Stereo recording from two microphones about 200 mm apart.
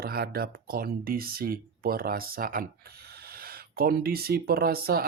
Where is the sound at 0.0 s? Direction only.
50° right (ahead or behind).